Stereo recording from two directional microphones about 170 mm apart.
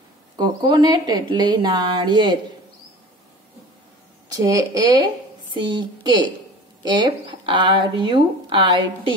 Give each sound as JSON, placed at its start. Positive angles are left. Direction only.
{"t": 0.4, "sound": "speech", "side_deg": -25}
{"t": 4.4, "sound": "speech", "side_deg": -20}